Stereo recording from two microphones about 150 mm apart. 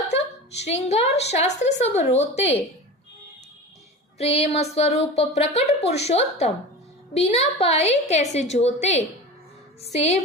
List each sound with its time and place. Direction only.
0.1 s a woman's voice: 45° left (ahead or behind)
4.2 s a woman's voice: 45° left (ahead or behind)